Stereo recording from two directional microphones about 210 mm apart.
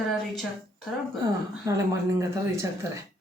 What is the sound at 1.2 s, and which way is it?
Speech, 15° right (ahead or behind).